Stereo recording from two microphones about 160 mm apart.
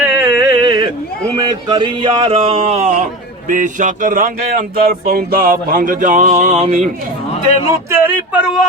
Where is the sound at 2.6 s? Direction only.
45° right (ahead or behind).